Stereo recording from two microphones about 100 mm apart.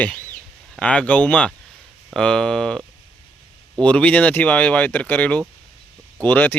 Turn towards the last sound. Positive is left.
turn(degrees=15)  # may be behind; listen again after turning